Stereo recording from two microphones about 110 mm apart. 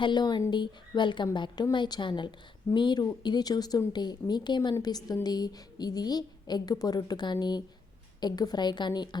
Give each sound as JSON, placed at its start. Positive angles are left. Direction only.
{"t": 0.0, "sound": "a woman's voice", "side_deg": 40}